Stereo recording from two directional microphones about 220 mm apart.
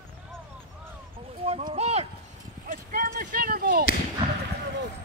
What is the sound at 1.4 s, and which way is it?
Clip-clop, 25° right (ahead or behind).